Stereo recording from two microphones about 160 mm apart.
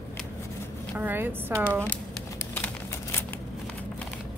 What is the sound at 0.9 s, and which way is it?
Speech, 10° right (ahead or behind).